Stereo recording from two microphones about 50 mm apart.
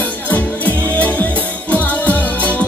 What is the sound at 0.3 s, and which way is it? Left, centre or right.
Music, left.